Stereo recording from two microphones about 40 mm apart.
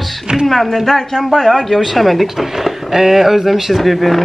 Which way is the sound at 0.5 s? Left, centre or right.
Centre.